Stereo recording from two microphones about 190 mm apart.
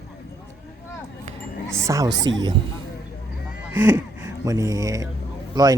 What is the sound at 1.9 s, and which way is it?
Speech, 20° right (ahead or behind).